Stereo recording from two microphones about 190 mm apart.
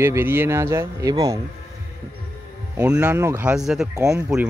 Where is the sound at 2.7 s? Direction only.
5° right (ahead or behind).